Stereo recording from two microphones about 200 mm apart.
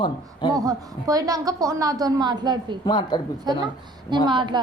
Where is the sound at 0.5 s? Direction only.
20° right (ahead or behind).